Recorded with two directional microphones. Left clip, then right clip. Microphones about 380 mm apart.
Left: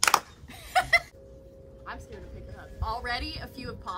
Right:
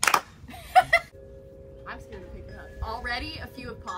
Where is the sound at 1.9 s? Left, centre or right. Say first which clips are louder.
Right 1 dB; centre.